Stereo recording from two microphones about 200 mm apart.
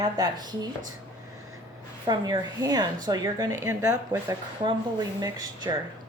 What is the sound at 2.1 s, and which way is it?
Speech, 20° right (ahead or behind).